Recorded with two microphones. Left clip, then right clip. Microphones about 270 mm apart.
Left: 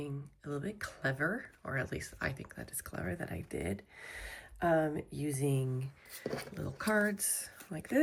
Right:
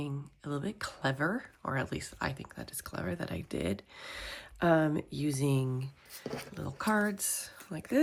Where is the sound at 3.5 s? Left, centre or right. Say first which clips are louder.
Right 4 dB; centre.